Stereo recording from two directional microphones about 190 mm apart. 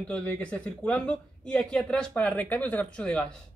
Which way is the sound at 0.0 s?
5° left (ahead or behind).